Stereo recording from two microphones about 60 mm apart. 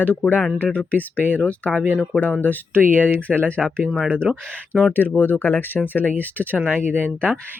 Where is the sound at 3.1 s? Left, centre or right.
Left.